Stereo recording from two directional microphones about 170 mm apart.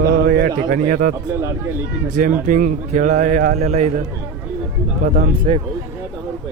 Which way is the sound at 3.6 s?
40° right (ahead or behind).